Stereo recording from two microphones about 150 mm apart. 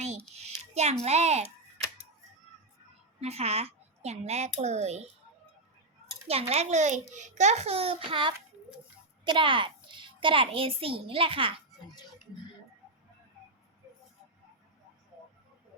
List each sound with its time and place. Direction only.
0.3 s music: 45° right (ahead or behind)
1.0 s a child's voice: 45° right (ahead or behind)
3.2 s a woman's voice: 45° right (ahead or behind)
6.5 s a child's voice: 50° right (ahead or behind)